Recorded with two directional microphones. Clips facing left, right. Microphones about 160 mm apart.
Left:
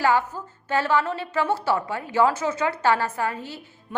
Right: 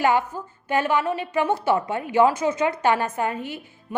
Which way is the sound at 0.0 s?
20° right (ahead or behind).